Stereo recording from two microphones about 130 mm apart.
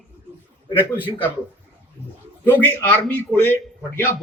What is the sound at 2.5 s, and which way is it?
A man's voice, 15° left (ahead or behind).